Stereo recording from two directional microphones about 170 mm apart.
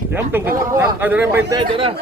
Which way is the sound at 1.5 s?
30° right (ahead or behind).